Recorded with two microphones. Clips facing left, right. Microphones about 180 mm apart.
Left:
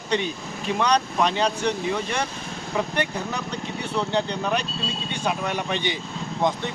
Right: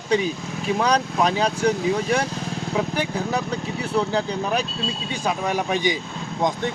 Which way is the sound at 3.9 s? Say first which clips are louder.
Right 2 dB; 5° right (ahead or behind).